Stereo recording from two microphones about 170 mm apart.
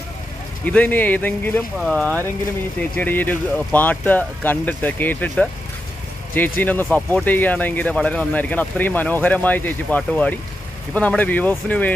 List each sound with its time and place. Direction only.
0.7 s speech: 10° left (ahead or behind)
6.3 s speech: 10° left (ahead or behind)